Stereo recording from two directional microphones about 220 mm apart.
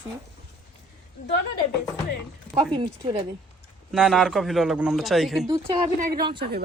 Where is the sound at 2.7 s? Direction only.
20° right (ahead or behind).